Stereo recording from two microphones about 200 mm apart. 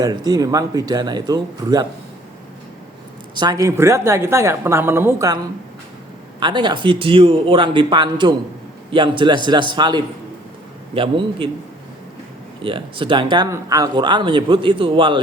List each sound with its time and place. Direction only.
0.0 s a man's voice: 20° right (ahead or behind)
3.3 s a woman's voice: 20° right (ahead or behind)
6.4 s a man's voice: 25° right (ahead or behind)
12.6 s a man's voice: 25° right (ahead or behind)